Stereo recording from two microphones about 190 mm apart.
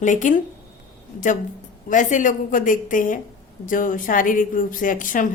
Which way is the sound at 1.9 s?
40° left (ahead or behind).